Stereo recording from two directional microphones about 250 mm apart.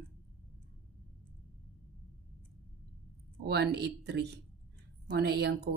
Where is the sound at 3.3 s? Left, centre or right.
Right.